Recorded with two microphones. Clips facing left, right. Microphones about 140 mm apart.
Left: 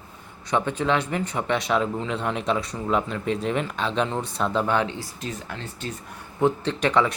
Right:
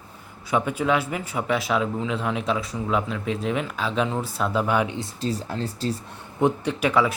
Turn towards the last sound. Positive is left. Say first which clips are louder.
# even
turn(degrees=-5)  # may be behind; listen again after turning